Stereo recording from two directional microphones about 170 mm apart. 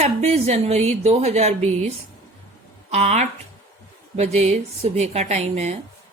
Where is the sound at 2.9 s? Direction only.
40° right (ahead or behind).